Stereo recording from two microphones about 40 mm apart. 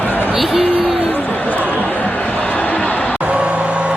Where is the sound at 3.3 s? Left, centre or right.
Right.